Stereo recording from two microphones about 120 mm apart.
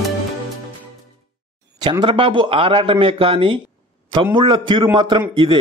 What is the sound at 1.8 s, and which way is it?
A man's voice, 35° right (ahead or behind).